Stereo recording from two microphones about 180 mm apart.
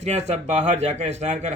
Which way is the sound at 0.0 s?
40° right (ahead or behind).